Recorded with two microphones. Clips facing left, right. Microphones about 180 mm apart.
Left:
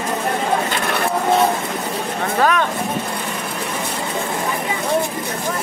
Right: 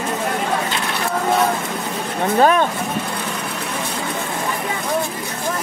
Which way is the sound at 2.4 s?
30° right (ahead or behind).